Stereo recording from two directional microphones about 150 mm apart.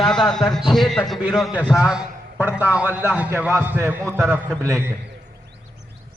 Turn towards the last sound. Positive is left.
turn(degrees=-20)  # may be behind; listen again after turning